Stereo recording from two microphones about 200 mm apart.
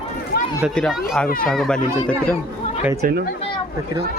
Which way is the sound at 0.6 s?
Centre (ahead or behind).